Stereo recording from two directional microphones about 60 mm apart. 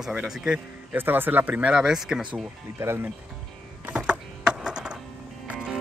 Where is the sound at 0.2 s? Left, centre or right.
Centre.